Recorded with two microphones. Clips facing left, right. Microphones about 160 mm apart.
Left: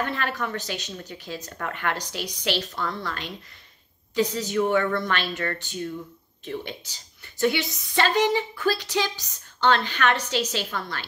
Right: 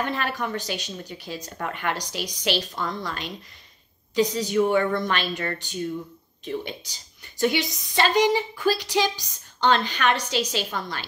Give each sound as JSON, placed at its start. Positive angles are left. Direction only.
{"t": 0.1, "sound": "a woman's voice", "side_deg": -15}